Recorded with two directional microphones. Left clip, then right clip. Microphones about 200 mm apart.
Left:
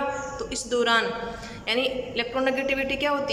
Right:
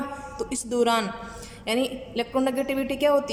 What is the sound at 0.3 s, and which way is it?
A woman's voice, 30° right (ahead or behind).